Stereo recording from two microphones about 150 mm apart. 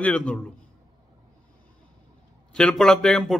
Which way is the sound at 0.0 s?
10° left (ahead or behind).